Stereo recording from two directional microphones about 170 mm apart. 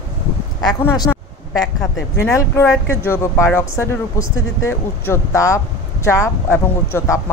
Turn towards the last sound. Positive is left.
turn(degrees=15)  # may be behind; listen again after turning